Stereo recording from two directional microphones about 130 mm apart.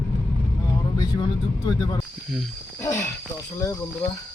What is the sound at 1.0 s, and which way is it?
Speech, 35° left (ahead or behind).